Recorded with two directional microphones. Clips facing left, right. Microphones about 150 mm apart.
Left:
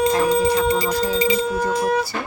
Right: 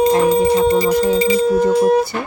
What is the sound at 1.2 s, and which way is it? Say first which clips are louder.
Speech: right 6 dB; 55° right (ahead or behind).